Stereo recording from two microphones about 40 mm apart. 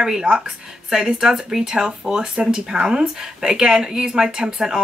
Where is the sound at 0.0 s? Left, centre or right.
Centre.